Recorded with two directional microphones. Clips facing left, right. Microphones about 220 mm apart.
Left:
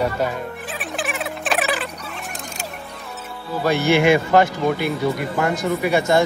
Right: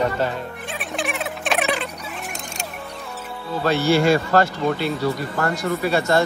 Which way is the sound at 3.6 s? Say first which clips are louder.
Left 1 dB; 15° left (ahead or behind).